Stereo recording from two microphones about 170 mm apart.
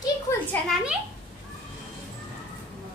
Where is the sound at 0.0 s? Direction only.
15° left (ahead or behind).